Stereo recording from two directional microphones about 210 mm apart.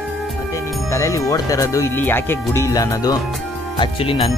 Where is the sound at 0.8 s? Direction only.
15° left (ahead or behind).